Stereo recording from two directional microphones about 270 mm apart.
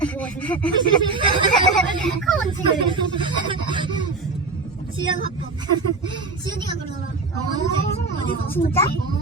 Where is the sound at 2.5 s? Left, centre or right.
Centre.